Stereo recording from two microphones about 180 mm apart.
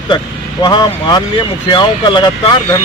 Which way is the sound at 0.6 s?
20° left (ahead or behind).